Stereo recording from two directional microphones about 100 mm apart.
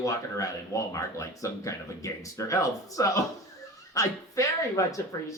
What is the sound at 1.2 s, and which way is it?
A woman's voice, 30° left (ahead or behind).